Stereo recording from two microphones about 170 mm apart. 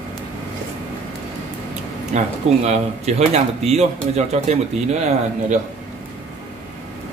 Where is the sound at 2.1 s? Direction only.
40° right (ahead or behind).